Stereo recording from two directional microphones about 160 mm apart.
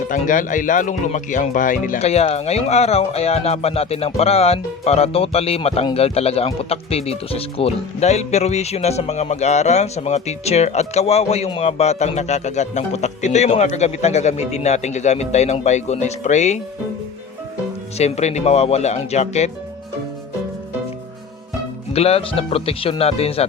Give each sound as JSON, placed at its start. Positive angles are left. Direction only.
{"t": 0.1, "sound": "speech", "side_deg": 55}
{"t": 17.9, "sound": "speech", "side_deg": 45}
{"t": 21.9, "sound": "speech", "side_deg": 40}